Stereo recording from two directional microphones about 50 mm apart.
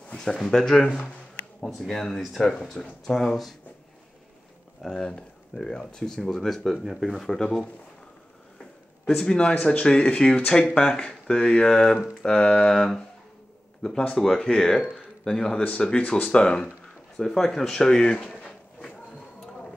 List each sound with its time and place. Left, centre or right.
0.2 s speech: centre
4.8 s speech: centre
7.3 s speech: centre
9.0 s speech: centre
12.2 s a sound: centre
12.4 s a man's voice: centre
16.0 s speech: left
16.3 s speech: centre
18.4 s a sound: left